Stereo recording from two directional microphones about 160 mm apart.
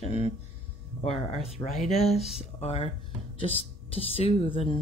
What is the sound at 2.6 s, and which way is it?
Speech, 40° left (ahead or behind).